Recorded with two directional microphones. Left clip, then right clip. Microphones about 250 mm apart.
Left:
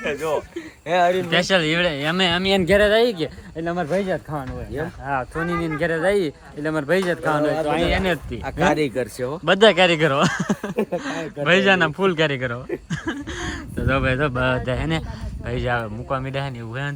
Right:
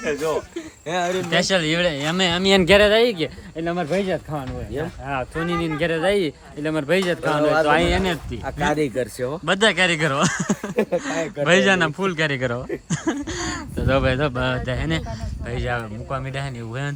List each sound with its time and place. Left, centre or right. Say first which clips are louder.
0.0 s a sound: right 1 dB; left
0.9 s speech: left 5 dB; left
1.3 s speech: left 1 dB; centre
7.6 s a man's voice: right 4 dB; right
8.0 s speech: left 2 dB; centre
8.4 s speech: left 2 dB; left
9.0 s speech: even; centre